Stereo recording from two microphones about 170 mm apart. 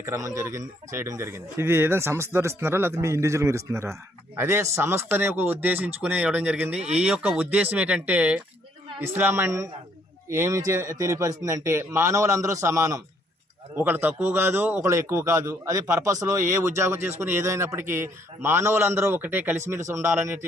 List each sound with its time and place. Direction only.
0.0 s a man's voice: 15° right (ahead or behind)